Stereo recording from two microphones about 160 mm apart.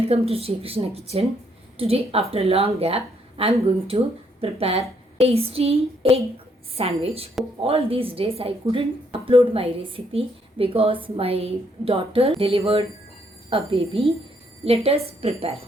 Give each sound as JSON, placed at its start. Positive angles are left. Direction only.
{"t": 0.1, "sound": "a woman's voice", "side_deg": -40}